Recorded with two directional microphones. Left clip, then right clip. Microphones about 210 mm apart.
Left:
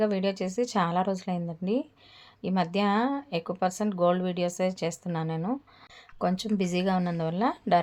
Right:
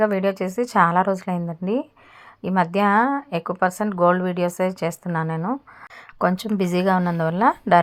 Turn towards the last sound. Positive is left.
turn(degrees=-20)  # may be behind; listen again after turning